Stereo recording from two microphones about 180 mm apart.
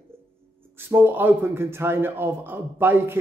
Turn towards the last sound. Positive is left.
turn(degrees=-10)  # may be behind; listen again after turning